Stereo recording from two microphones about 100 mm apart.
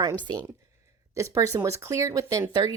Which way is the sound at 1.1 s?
35° right (ahead or behind).